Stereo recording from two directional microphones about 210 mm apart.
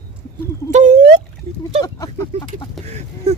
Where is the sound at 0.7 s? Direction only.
35° right (ahead or behind).